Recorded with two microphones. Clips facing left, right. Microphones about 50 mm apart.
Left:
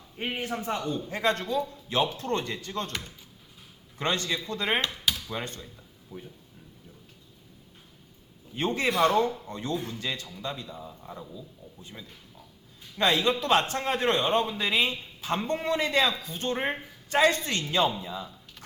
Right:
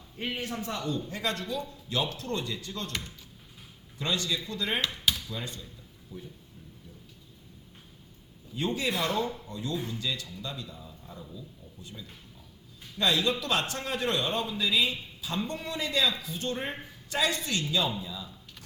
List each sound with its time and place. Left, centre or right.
0.2 s speech: left
3.9 s speech: left
6.1 s speech: left
8.5 s speech: left